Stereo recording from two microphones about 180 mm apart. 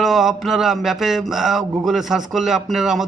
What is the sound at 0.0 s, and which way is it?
A man's voice, centre (ahead or behind).